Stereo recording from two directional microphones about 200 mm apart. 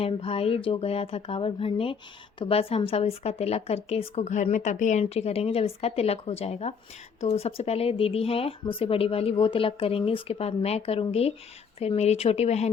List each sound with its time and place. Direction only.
0.0 s a woman's voice: 30° left (ahead or behind)